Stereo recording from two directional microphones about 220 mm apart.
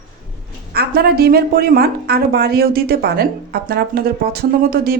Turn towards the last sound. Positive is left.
turn(degrees=-45)  # may be behind; listen again after turning